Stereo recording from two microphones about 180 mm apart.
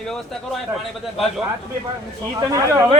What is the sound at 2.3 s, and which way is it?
Speech, 20° right (ahead or behind).